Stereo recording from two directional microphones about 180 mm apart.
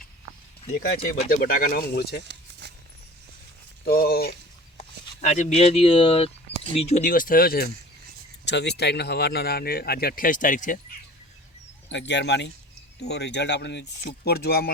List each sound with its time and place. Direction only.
0.7 s speech: 60° left (ahead or behind)
2.2 s keys jangling: 70° right (ahead or behind)
3.8 s speech: 60° left (ahead or behind)
4.8 s a sound: 40° left (ahead or behind)
5.5 s speech: 30° left (ahead or behind)
7.0 s speech: 55° left (ahead or behind)
8.4 s speech: 70° left (ahead or behind); by 10.8 s 45° left (ahead or behind)
11.9 s speech: 75° left (ahead or behind)
14.3 s speech: 65° left (ahead or behind)